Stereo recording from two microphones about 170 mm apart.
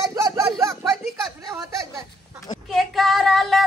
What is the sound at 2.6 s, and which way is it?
Speech, centre (ahead or behind).